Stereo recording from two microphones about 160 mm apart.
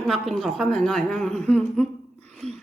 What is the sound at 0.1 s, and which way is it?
A woman's voice, centre (ahead or behind).